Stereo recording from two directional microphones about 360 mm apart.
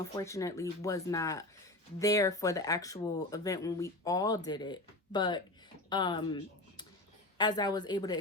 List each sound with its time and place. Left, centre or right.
0.1 s speech: centre